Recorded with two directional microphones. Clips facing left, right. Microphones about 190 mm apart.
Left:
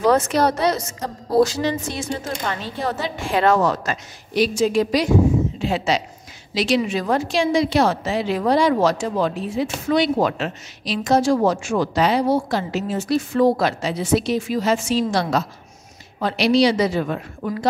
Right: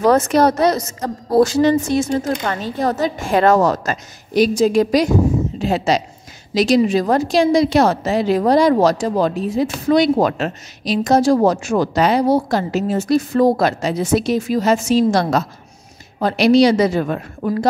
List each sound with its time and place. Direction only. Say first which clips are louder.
0.0 s a woman's voice: right 4 dB; 45° right (ahead or behind)
1.4 s a woman's voice: right 6 dB; 50° right (ahead or behind)